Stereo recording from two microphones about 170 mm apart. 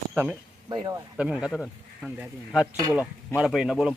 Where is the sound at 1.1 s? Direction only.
5° right (ahead or behind).